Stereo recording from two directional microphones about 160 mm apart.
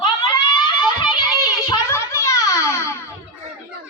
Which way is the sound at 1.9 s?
15° left (ahead or behind).